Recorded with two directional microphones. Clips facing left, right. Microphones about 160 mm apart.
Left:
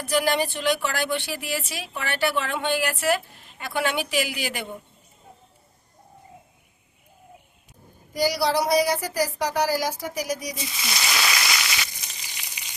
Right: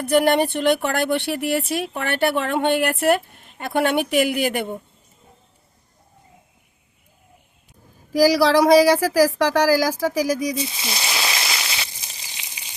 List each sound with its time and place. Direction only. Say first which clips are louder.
0.0 s speech: right 6 dB; 55° right (ahead or behind)
8.1 s speech: right 8 dB; 90° right
10.7 s a sound: right 1 dB; 30° right (ahead or behind)